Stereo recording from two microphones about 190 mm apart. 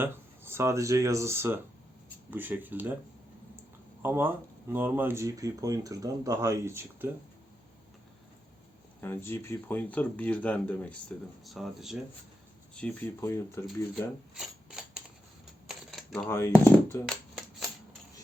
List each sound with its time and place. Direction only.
0.0 s speech: 10° right (ahead or behind)
4.0 s speech: 10° right (ahead or behind)
9.0 s speech: 10° left (ahead or behind)
14.3 s mechanisms: 5° right (ahead or behind)
15.6 s typewriter: centre (ahead or behind)
16.3 s speech: 15° left (ahead or behind)
17.1 s shuffling cards: centre (ahead or behind)